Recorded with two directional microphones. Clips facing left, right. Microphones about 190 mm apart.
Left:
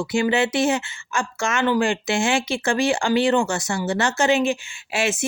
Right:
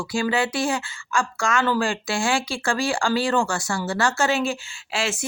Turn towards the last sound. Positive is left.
turn(degrees=20)  # may be behind; listen again after turning